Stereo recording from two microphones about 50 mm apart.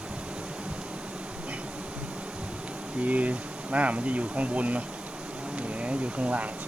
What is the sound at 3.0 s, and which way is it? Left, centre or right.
Speech, right.